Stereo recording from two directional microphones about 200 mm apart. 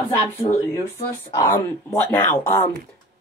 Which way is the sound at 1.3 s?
20° left (ahead or behind).